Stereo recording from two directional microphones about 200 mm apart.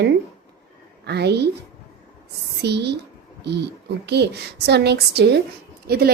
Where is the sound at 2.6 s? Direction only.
55° right (ahead or behind).